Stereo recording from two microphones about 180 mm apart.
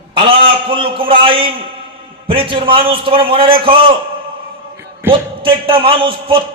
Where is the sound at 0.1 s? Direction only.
30° right (ahead or behind).